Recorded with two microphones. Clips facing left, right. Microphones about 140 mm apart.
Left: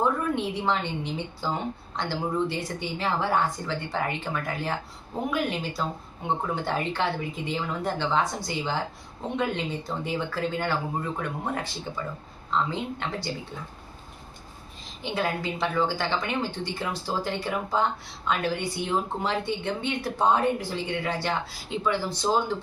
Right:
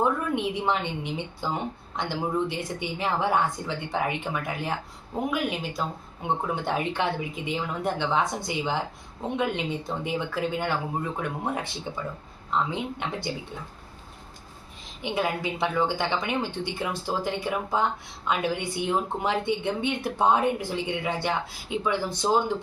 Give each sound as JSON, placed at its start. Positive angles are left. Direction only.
{"t": 0.0, "sound": "speech", "side_deg": -15}
{"t": 15.0, "sound": "speech", "side_deg": -15}